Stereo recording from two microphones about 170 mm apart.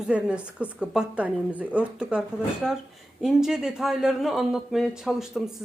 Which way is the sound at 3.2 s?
5° right (ahead or behind).